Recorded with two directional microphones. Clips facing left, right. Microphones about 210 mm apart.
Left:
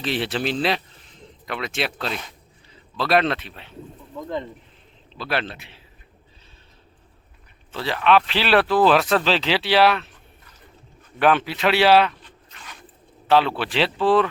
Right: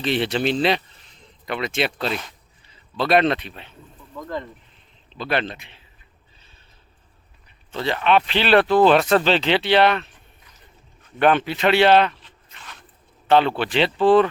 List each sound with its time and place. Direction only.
0.0 s speech: centre (ahead or behind)
4.1 s speech: 20° left (ahead or behind)
5.1 s speech: 5° left (ahead or behind)
7.7 s speech: centre (ahead or behind)
11.2 s speech: centre (ahead or behind)